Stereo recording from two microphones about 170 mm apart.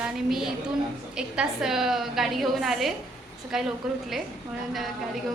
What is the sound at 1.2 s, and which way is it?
A woman's voice, 5° right (ahead or behind).